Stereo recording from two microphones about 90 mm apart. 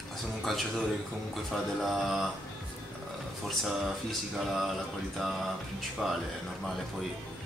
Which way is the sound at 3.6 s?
Centre (ahead or behind).